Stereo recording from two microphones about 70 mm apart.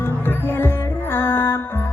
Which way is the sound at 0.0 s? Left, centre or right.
Left.